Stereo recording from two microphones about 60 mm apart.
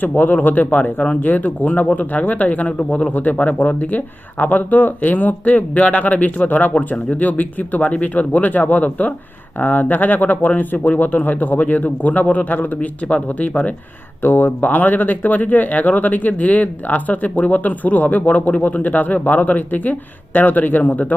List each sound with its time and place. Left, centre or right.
0.2 s speech: left
6.7 s speech: centre
13.5 s speech: centre
14.2 s speech: left